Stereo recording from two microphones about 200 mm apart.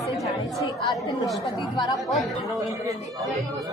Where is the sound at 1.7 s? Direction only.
20° left (ahead or behind).